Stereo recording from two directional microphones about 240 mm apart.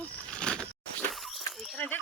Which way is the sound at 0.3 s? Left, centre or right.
Centre.